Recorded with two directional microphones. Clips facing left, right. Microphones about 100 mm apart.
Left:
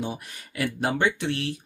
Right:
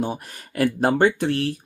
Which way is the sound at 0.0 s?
45° right (ahead or behind).